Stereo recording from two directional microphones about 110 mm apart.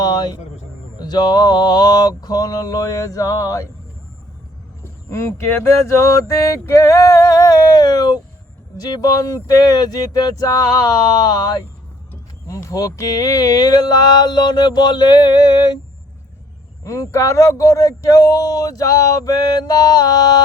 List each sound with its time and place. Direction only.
0.0 s a sound: 35° left (ahead or behind)
0.9 s speech: 40° left (ahead or behind)
4.8 s speech: 25° left (ahead or behind); by 15.8 s 40° left (ahead or behind)
16.8 s speech: 30° left (ahead or behind)